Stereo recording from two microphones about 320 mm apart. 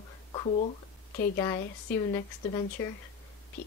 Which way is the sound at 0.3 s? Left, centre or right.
Centre.